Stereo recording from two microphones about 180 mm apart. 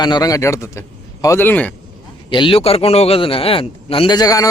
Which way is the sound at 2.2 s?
25° left (ahead or behind).